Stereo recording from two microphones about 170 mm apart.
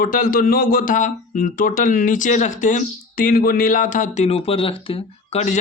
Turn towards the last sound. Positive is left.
turn(degrees=40)  # may be behind; listen again after turning